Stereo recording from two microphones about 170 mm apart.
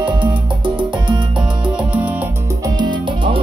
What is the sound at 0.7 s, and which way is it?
Music, 30° right (ahead or behind).